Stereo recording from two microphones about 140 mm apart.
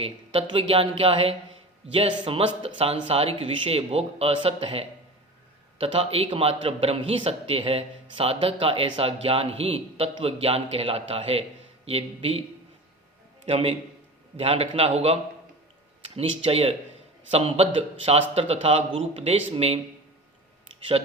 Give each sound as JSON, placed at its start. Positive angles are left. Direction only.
{"t": 0.0, "sound": "a man's voice", "side_deg": -40}
{"t": 20.9, "sound": "a man's voice", "side_deg": -45}